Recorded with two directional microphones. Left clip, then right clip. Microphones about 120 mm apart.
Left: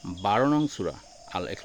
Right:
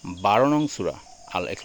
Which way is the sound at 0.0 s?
20° right (ahead or behind).